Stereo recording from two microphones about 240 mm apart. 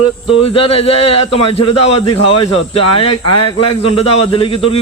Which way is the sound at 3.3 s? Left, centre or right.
Left.